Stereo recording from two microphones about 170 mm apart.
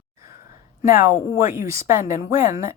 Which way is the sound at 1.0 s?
15° right (ahead or behind).